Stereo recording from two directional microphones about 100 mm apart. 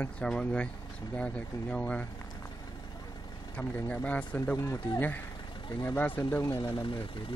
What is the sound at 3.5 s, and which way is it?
Speech, 10° left (ahead or behind).